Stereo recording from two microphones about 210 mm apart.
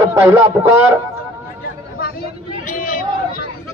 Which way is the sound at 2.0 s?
45° left (ahead or behind).